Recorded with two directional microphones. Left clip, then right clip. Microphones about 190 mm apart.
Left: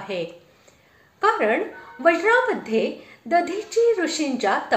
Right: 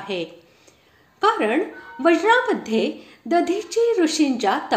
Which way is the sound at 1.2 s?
35° right (ahead or behind).